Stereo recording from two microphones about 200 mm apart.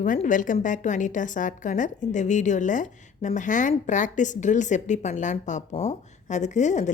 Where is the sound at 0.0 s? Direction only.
40° left (ahead or behind).